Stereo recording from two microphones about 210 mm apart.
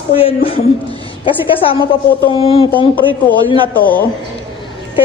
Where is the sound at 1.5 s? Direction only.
25° left (ahead or behind).